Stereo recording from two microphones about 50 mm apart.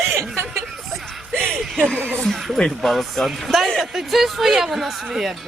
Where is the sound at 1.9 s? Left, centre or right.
Left.